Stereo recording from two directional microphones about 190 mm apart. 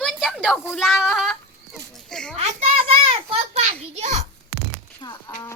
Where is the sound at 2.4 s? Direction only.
35° right (ahead or behind).